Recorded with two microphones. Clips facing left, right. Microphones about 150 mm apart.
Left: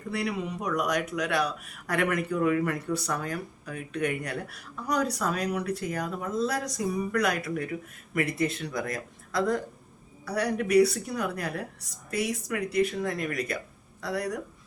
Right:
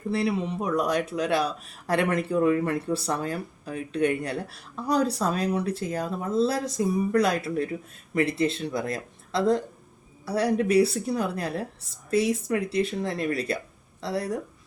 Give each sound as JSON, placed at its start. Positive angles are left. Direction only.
{"t": 0.1, "sound": "speech", "side_deg": -30}